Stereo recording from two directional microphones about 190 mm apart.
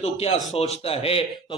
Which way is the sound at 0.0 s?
35° left (ahead or behind).